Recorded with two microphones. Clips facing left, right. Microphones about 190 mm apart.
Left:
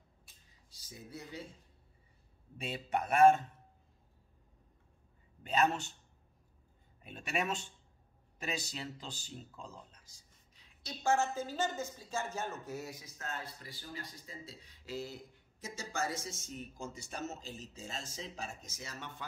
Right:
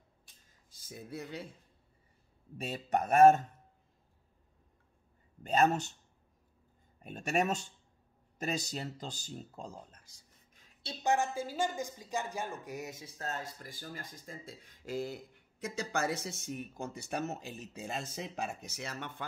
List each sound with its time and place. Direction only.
0.5 s a sound: 50° right (ahead or behind)
2.5 s speech: 45° right (ahead or behind)
5.4 s speech: 45° right (ahead or behind)
7.0 s speech: 45° right (ahead or behind)
11.0 s speech: 15° right (ahead or behind)
13.2 s speech: 40° right (ahead or behind)
15.6 s speech: 65° right (ahead or behind)